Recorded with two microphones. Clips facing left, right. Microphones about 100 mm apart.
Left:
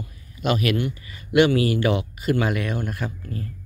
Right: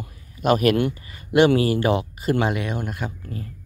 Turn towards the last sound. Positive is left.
turn(degrees=-15)  # may be behind; listen again after turning